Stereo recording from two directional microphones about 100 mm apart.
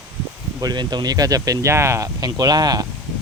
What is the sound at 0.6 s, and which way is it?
Speech, 45° right (ahead or behind).